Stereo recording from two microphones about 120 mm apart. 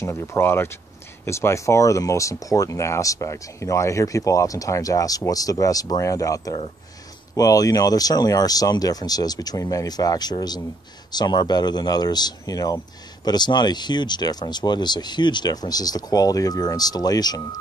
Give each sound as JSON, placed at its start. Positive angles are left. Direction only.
{"t": 0.0, "sound": "speech", "side_deg": 25}